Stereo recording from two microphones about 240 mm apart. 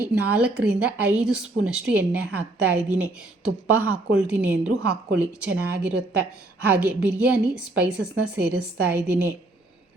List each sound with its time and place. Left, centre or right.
0.0 s a woman's voice: centre